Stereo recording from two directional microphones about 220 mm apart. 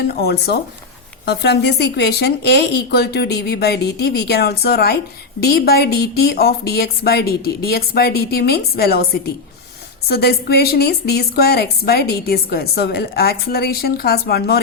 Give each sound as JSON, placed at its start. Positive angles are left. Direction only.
{"t": 0.1, "sound": "a woman's voice", "side_deg": 45}
{"t": 10.1, "sound": "a woman's voice", "side_deg": 45}